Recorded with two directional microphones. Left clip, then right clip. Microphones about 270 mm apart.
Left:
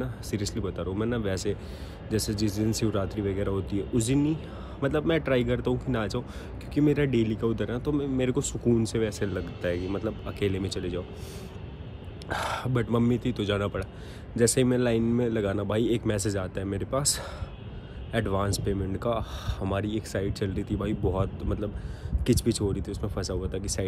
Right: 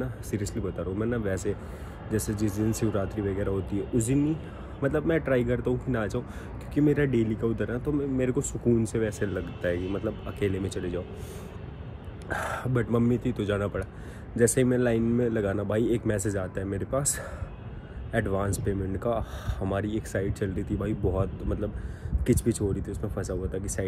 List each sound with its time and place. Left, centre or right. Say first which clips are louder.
0.0 s speech: even; centre
3.9 s speech: even; right
4.2 s speech: even; centre
12.3 s speech: left 1 dB; centre